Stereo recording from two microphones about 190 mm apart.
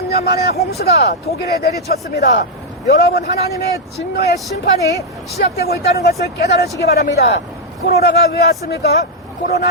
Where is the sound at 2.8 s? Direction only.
55° left (ahead or behind).